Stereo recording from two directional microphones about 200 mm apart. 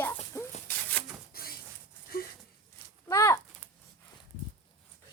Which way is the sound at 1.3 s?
50° left (ahead or behind).